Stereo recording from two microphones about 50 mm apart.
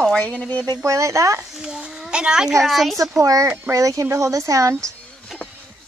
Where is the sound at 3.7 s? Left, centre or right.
Right.